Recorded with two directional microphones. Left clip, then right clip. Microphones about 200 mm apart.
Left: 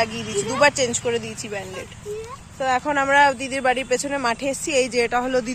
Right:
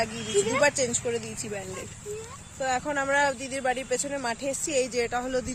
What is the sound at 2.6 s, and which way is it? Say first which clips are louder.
Speech: left 7 dB; 5° left (ahead or behind).